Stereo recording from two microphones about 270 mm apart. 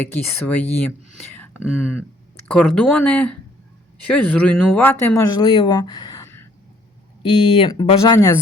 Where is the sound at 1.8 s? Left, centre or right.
Centre.